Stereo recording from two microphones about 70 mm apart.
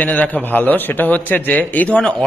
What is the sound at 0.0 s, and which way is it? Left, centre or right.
A man's voice, left.